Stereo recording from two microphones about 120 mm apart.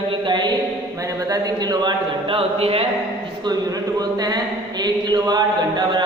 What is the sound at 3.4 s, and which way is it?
Speech, 30° right (ahead or behind).